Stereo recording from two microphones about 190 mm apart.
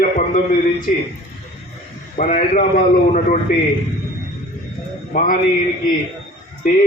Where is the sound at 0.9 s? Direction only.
45° left (ahead or behind).